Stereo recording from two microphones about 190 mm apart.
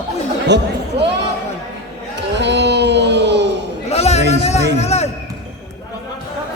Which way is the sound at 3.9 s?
35° left (ahead or behind).